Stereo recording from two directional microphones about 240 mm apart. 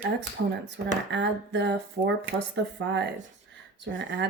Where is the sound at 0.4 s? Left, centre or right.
Right.